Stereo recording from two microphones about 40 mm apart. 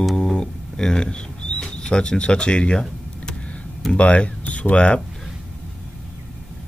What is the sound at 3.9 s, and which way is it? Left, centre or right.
Speech, left.